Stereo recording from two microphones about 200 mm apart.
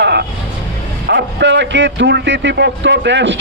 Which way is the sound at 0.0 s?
55° right (ahead or behind).